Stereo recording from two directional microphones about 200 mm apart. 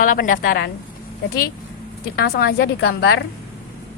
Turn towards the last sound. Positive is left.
turn(degrees=55)  # may be behind; listen again after turning